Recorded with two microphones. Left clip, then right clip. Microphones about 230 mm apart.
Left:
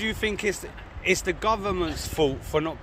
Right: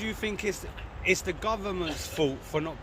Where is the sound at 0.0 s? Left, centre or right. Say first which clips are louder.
Left 5 dB; left.